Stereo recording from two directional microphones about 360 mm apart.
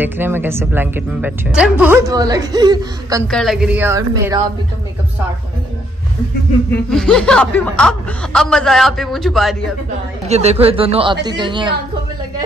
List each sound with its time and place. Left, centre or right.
0.0 s a woman's voice: centre
3.3 s speech: centre
6.7 s speech: centre
10.2 s a woman's voice: centre